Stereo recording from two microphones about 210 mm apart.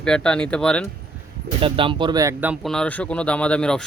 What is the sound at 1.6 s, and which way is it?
Speech, 25° right (ahead or behind).